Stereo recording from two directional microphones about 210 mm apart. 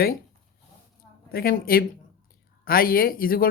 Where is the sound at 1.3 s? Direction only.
45° left (ahead or behind).